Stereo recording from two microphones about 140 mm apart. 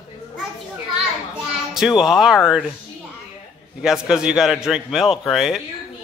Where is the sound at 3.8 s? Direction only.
5° right (ahead or behind).